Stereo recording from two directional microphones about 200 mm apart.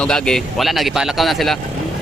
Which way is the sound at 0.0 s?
5° left (ahead or behind).